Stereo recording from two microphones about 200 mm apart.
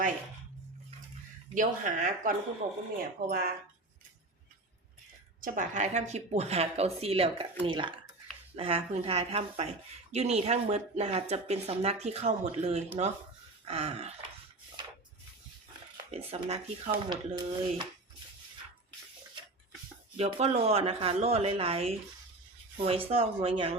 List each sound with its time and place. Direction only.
1.5 s speech: 40° right (ahead or behind)
5.4 s speech: 40° right (ahead or behind)
16.1 s speech: 30° right (ahead or behind)
20.1 s speech: 30° right (ahead or behind)